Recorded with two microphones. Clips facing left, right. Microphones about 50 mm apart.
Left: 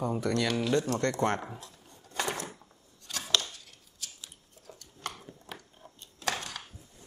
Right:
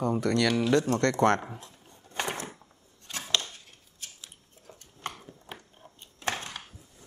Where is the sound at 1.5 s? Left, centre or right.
Right.